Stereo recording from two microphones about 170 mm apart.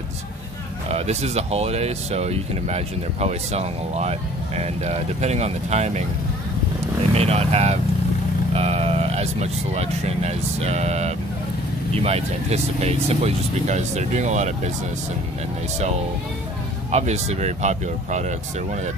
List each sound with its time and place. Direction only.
0.8 s speech: 40° right (ahead or behind)
7.2 s speech: 40° right (ahead or behind)
16.9 s speech: 40° right (ahead or behind)